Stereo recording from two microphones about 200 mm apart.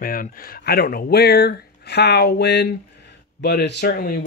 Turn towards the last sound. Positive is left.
turn(degrees=50)  # may be behind; listen again after turning